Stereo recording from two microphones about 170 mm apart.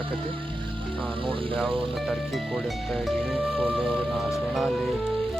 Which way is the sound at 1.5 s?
Centre (ahead or behind).